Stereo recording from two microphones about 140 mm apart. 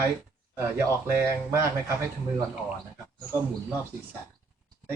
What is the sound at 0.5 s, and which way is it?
Speech, 20° right (ahead or behind).